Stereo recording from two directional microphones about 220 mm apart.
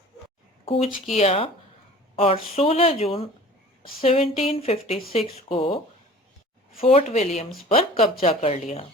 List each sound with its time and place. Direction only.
0.6 s a sound: 25° left (ahead or behind)
1.1 s a woman's voice: 30° left (ahead or behind)
6.8 s a woman's voice: 30° left (ahead or behind)